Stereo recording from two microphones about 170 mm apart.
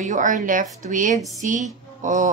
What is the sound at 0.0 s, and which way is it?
A woman's voice, 45° right (ahead or behind).